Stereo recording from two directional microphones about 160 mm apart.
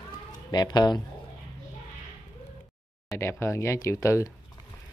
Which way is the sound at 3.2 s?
15° left (ahead or behind).